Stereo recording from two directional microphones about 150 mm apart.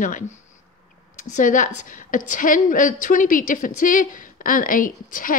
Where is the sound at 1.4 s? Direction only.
60° left (ahead or behind).